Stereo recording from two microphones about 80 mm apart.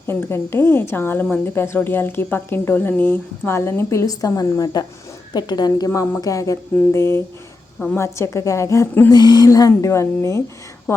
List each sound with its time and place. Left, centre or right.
0.1 s a woman's voice: left
9.1 s a woman's voice: left